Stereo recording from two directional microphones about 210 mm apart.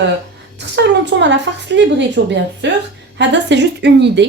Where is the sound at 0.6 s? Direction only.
55° right (ahead or behind).